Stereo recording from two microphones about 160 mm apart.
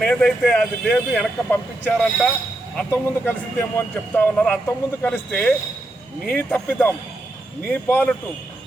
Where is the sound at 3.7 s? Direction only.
10° left (ahead or behind).